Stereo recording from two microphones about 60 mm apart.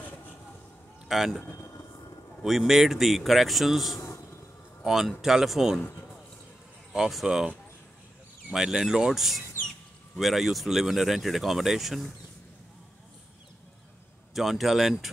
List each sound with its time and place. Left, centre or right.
1.0 s speech: centre
1.6 s train: left
2.4 s speech: centre
4.0 s a sound: left
4.8 s a man's voice: centre
6.9 s speech: centre
8.5 s speech: centre
14.3 s speech: centre